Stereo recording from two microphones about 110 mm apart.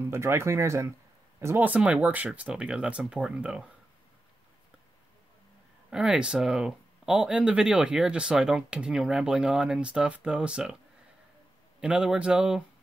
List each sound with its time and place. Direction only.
0.0 s speech: 20° right (ahead or behind)
1.7 s speech: 15° right (ahead or behind)
5.9 s speech: 5° right (ahead or behind)
11.8 s speech: 10° right (ahead or behind)